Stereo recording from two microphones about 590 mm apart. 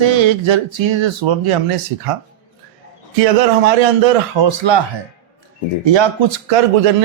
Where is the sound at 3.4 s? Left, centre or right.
Right.